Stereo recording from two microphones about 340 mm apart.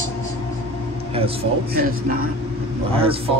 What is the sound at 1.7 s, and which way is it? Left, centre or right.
Speech, right.